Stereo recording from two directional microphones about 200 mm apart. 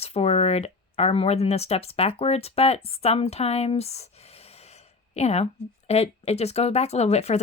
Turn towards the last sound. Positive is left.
turn(degrees=35)  # may be behind; listen again after turning